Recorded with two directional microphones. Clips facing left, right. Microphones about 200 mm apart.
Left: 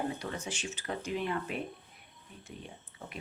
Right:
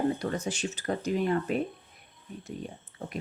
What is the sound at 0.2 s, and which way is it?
Speech, 40° right (ahead or behind).